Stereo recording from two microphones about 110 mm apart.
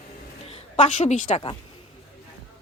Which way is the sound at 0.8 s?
90° left.